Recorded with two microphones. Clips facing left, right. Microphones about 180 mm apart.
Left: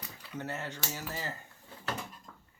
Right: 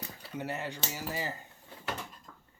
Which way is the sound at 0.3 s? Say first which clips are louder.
Right 2 dB; 15° right (ahead or behind).